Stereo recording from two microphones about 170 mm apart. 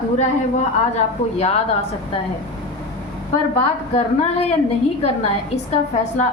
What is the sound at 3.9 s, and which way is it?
Speech, 40° left (ahead or behind).